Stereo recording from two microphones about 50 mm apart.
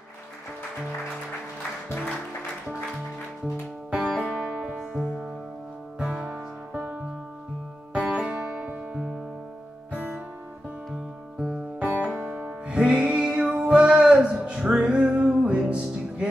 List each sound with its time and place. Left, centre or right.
3.4 s music: right
4.7 s music: centre
5.9 s music: centre
6.7 s music: right
9.9 s music: right
11.5 s music: right